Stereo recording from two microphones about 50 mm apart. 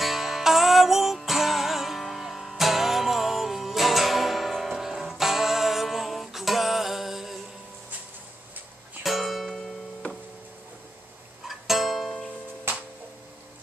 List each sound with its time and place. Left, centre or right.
0.0 s music: centre
9.0 s music: centre
11.4 s music: centre
12.7 s music: right